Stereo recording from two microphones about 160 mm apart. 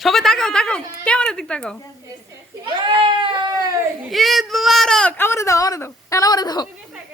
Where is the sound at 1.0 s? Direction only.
5° left (ahead or behind).